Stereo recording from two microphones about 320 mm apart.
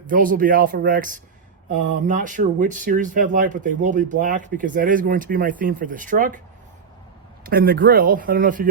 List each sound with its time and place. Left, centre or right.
0.1 s speech: right
7.4 s speech: right